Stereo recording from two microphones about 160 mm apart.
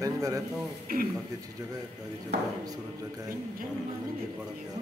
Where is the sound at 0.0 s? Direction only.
20° right (ahead or behind).